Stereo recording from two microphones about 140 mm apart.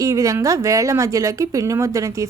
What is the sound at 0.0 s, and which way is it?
A woman's voice, 25° right (ahead or behind).